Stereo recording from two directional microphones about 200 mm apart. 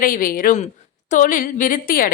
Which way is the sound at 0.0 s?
45° left (ahead or behind).